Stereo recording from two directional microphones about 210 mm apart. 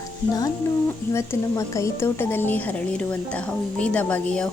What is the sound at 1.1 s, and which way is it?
A woman's voice, 15° left (ahead or behind).